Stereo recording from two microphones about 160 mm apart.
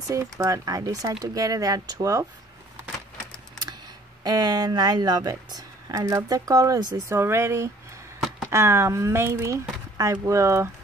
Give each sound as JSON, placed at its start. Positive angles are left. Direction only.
{"t": 0.1, "sound": "speech", "side_deg": -20}
{"t": 4.2, "sound": "speech", "side_deg": -25}